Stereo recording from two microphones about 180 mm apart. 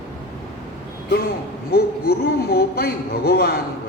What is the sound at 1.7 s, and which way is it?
A man's voice, 60° left (ahead or behind).